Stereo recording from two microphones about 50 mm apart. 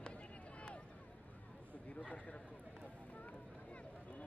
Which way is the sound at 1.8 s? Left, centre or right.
Left.